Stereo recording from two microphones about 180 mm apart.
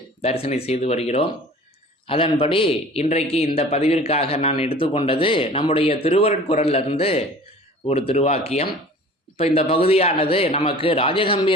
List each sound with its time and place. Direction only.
0.2 s a man's voice: 35° left (ahead or behind)